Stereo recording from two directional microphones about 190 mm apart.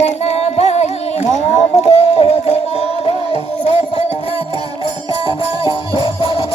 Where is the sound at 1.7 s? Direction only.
35° left (ahead or behind).